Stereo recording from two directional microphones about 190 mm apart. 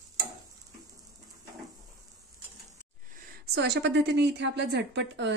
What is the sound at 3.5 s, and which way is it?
A woman's voice, 60° right (ahead or behind).